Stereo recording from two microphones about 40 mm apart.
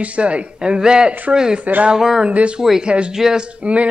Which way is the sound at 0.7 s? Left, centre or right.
Centre.